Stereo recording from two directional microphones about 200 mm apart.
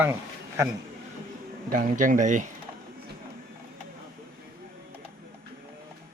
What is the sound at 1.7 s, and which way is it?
Speech, 40° right (ahead or behind).